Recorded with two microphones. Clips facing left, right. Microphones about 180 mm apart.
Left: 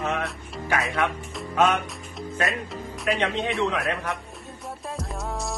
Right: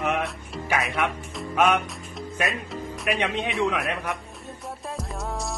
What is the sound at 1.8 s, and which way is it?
Music, centre (ahead or behind).